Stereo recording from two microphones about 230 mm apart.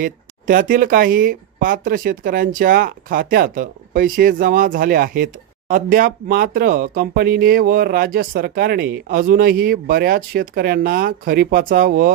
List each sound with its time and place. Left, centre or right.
0.0 s speech: right